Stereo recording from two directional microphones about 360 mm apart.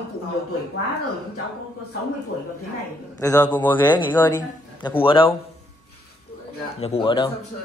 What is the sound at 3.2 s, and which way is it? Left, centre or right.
A man's voice, centre.